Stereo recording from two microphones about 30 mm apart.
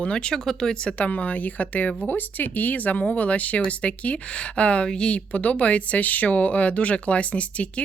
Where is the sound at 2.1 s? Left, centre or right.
Left.